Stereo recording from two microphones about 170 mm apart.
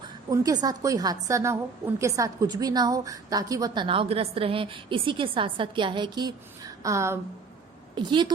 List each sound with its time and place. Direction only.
0.0 s a woman's voice: 20° right (ahead or behind)
7.9 s a woman's voice: 25° right (ahead or behind)